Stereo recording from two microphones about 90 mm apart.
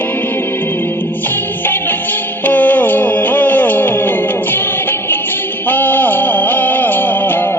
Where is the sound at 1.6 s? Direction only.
20° left (ahead or behind).